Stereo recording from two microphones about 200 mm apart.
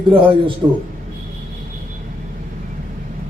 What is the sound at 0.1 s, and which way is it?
Speech, 25° right (ahead or behind).